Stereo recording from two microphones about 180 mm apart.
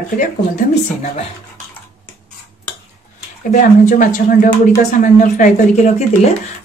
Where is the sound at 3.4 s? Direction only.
45° left (ahead or behind).